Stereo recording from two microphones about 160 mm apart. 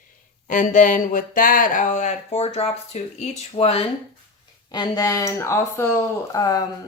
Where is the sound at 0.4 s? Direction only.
55° left (ahead or behind).